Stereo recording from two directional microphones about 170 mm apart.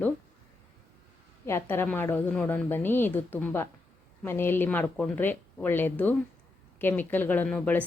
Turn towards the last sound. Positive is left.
turn(degrees=10)  # may be behind; listen again after turning